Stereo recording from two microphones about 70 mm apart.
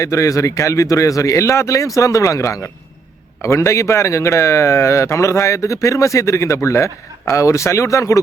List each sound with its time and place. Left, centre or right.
0.0 s speech: left